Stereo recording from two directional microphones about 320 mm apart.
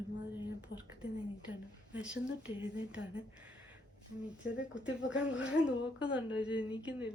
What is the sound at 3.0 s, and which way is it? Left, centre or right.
Speech, left.